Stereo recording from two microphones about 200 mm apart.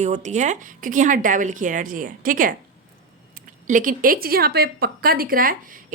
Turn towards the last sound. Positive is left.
turn(degrees=-45)  # may be behind; listen again after turning